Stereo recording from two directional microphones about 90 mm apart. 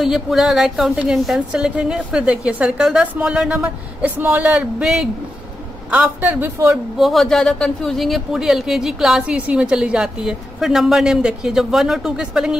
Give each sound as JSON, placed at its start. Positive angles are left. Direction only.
{"t": 0.0, "sound": "a woman's voice", "side_deg": -5}
{"t": 5.9, "sound": "a man's voice", "side_deg": -20}
{"t": 7.0, "sound": "speech", "side_deg": 0}